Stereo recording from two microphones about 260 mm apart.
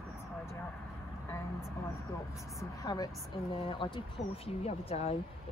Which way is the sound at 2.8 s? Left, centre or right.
Centre.